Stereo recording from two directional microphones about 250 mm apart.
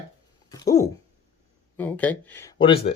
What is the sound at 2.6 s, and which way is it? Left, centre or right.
Speech, left.